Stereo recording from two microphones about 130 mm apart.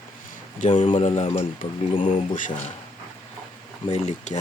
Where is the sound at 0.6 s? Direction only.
65° left (ahead or behind).